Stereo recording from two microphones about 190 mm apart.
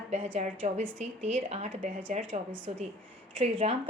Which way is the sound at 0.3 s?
40° right (ahead or behind).